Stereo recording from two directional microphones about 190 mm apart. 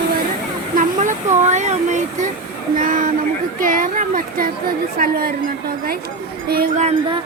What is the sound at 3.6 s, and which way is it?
Chatter, 45° right (ahead or behind).